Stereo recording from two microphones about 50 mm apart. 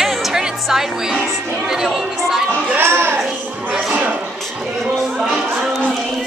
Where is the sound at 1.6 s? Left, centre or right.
Centre.